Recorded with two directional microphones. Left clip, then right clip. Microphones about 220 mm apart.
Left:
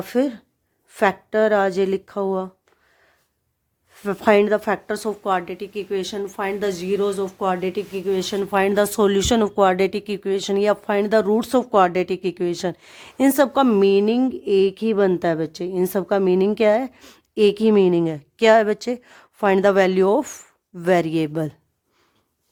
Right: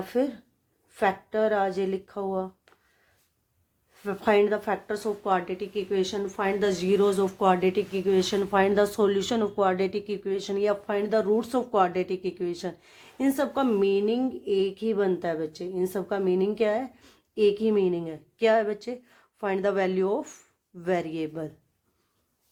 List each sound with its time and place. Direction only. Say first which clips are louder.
0.0 s speech: left 5 dB; 50° left (ahead or behind)
3.9 s speech: left 6 dB; 50° left (ahead or behind)